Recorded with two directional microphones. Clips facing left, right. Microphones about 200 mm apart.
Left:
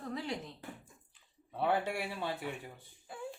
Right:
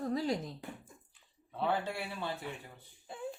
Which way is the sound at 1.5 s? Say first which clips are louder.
Left 2 dB; 15° left (ahead or behind).